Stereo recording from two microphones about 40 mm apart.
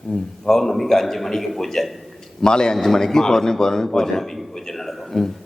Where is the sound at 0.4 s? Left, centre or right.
Centre.